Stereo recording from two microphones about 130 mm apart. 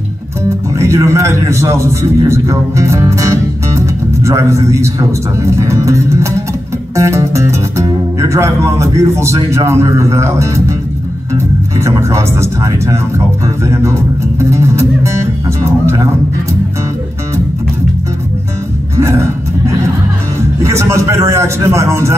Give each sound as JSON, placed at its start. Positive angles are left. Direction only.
{"t": 0.7, "sound": "a man's voice", "side_deg": -20}
{"t": 14.4, "sound": "speech", "side_deg": -20}
{"t": 18.9, "sound": "music", "side_deg": -20}
{"t": 20.6, "sound": "speech", "side_deg": -20}